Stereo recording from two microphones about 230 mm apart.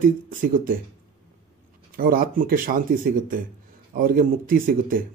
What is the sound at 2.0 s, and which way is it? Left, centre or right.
A man's voice, right.